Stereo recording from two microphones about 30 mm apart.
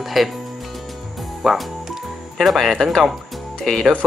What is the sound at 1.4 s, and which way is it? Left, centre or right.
Speech, centre.